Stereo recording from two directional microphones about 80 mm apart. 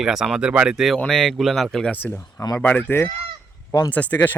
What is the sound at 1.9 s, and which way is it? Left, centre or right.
Speech, left.